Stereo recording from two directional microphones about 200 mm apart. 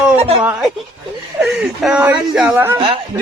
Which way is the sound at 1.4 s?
5° right (ahead or behind).